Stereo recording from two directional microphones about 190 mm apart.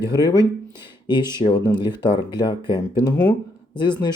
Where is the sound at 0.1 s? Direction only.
20° left (ahead or behind).